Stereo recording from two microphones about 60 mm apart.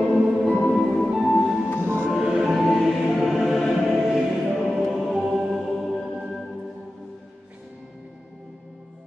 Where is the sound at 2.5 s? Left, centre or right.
Centre.